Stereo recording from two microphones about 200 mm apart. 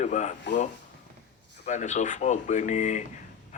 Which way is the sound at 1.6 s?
35° left (ahead or behind).